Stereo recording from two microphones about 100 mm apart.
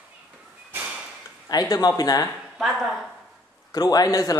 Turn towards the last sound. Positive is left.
turn(degrees=35)  # may be behind; listen again after turning